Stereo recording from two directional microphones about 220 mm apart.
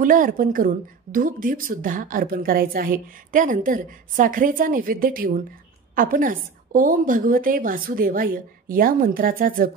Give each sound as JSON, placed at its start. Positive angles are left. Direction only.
{"t": 0.0, "sound": "a woman's voice", "side_deg": -40}